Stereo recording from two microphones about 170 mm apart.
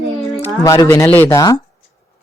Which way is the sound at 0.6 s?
20° left (ahead or behind).